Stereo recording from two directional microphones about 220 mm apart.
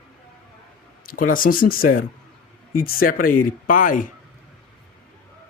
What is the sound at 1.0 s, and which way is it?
Speech, 40° left (ahead or behind).